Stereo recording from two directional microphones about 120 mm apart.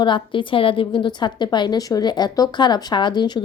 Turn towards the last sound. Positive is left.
turn(degrees=35)  # may be behind; listen again after turning